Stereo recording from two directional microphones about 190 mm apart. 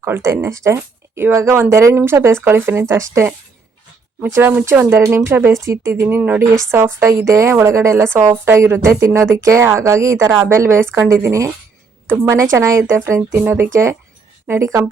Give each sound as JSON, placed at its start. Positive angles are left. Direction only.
{"t": 0.0, "sound": "speech", "side_deg": -15}